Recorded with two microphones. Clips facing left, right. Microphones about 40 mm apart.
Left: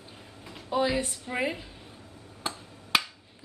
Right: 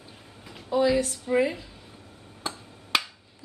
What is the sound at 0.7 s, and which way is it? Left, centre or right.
Speech, left.